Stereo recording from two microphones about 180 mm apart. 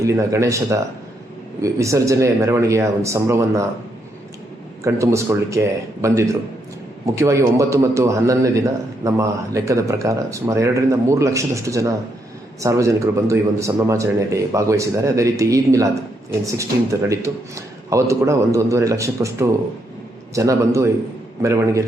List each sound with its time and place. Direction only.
0.0 s a man's voice: 15° right (ahead or behind)
4.8 s a man's voice: 15° right (ahead or behind)